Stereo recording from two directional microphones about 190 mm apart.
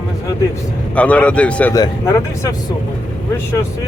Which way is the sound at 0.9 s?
5° left (ahead or behind).